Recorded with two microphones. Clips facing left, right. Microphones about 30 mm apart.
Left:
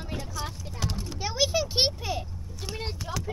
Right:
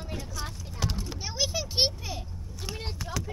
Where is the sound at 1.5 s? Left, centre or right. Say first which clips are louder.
Left 2 dB; left.